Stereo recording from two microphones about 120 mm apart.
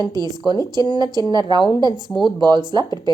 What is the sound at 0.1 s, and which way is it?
A woman's voice, 35° right (ahead or behind).